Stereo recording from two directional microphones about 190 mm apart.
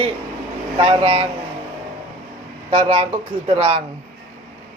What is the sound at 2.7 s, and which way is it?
Speech, 30° right (ahead or behind).